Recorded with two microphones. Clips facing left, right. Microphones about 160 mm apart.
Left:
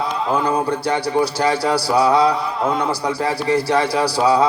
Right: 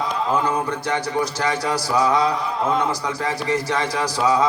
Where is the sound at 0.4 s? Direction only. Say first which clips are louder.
Left 4 dB; 30° left (ahead or behind).